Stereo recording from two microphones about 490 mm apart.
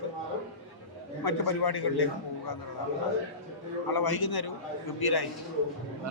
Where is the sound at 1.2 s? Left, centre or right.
Left.